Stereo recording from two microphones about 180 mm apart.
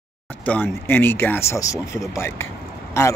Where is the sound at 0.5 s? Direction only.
10° left (ahead or behind).